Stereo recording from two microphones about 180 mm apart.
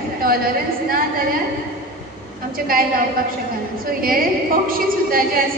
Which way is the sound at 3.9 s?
55° right (ahead or behind).